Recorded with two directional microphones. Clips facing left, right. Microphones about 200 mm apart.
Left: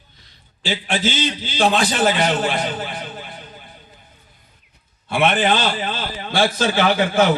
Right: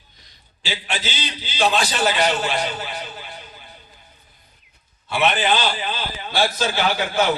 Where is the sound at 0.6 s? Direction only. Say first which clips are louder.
Left 7 dB; 50° left (ahead or behind).